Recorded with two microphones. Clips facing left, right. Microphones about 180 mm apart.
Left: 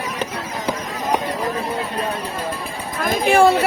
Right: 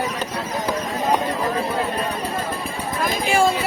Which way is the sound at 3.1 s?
60° left (ahead or behind).